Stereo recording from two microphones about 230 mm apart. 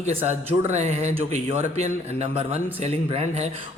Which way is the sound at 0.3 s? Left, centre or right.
Right.